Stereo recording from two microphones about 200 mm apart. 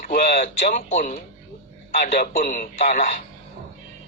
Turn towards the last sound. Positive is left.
turn(degrees=40)  # may be behind; listen again after turning